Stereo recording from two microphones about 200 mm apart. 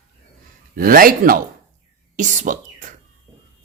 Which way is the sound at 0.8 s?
45° right (ahead or behind).